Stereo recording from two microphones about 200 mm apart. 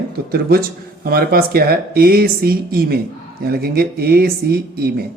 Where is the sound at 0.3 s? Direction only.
50° right (ahead or behind).